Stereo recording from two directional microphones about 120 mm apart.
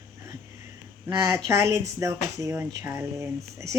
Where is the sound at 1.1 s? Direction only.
25° right (ahead or behind).